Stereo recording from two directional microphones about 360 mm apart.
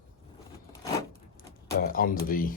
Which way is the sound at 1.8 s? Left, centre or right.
Left.